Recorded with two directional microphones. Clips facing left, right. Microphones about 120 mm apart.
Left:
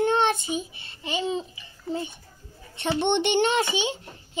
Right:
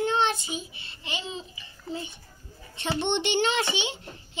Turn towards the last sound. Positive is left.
turn(degrees=45)  # may be behind; listen again after turning